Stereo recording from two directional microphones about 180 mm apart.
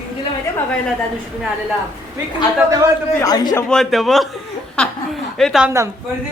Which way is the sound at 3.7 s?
Centre (ahead or behind).